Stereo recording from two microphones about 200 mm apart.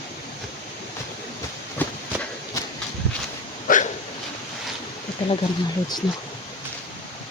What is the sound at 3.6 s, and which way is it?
Hiccup, 40° left (ahead or behind).